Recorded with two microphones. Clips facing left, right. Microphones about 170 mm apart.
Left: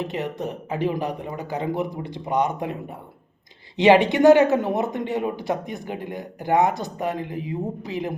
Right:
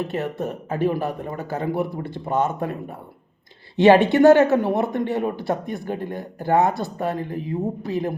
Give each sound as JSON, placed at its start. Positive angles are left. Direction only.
{"t": 0.0, "sound": "speech", "side_deg": 15}
{"t": 3.8, "sound": "speech", "side_deg": 15}